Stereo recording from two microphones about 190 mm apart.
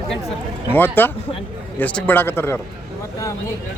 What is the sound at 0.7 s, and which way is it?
Speech, 10° left (ahead or behind).